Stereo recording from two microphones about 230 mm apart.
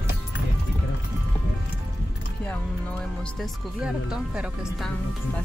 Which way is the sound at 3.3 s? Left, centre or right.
Centre.